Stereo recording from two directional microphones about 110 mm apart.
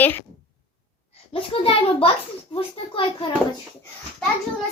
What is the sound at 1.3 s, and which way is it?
Speech, 60° left (ahead or behind).